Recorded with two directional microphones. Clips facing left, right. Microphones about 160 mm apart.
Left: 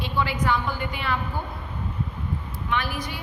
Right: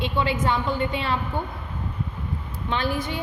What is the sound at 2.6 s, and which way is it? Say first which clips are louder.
Speech: right 3 dB; 25° right (ahead or behind).